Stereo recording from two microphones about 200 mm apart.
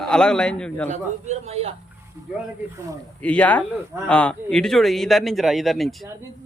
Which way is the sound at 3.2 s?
5° left (ahead or behind).